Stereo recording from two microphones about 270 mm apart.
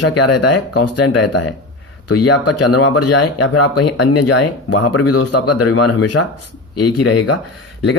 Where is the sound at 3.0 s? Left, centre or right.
Left.